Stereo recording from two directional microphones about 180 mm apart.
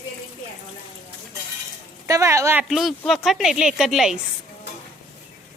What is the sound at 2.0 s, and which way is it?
Speech, 15° right (ahead or behind).